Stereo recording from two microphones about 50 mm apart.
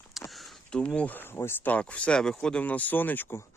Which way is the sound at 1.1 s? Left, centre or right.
Left.